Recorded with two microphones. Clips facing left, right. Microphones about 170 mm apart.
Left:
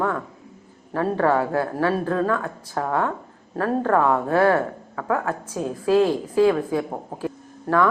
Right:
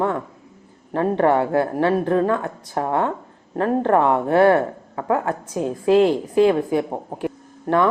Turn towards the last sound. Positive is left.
turn(degrees=-20)  # may be behind; listen again after turning